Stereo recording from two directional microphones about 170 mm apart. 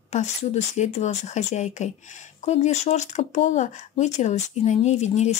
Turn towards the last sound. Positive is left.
turn(degrees=40)  # may be behind; listen again after turning